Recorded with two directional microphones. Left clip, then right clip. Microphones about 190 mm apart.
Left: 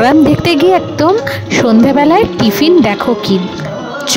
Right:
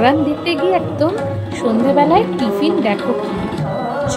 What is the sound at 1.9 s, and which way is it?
Speech, 55° left (ahead or behind).